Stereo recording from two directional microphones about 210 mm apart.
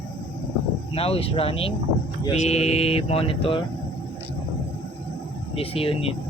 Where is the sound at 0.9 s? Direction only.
25° left (ahead or behind).